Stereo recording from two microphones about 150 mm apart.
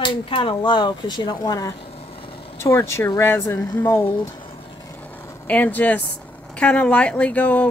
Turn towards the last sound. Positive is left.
turn(degrees=10)  # may be behind; listen again after turning